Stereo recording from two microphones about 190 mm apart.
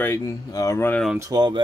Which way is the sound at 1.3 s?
20° right (ahead or behind).